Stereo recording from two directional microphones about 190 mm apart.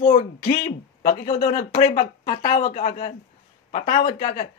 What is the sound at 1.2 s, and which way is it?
Speech, 30° left (ahead or behind).